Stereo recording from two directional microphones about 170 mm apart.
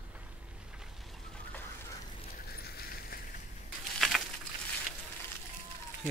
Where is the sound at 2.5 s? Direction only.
65° left (ahead or behind).